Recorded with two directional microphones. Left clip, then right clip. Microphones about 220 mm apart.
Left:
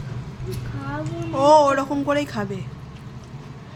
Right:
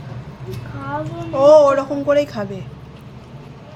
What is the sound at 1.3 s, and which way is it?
Speech, 15° left (ahead or behind).